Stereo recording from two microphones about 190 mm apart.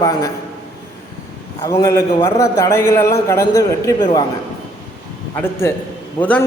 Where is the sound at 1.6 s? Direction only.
15° left (ahead or behind).